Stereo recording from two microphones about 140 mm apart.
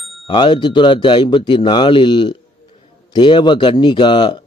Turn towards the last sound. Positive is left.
turn(degrees=30)  # may be behind; listen again after turning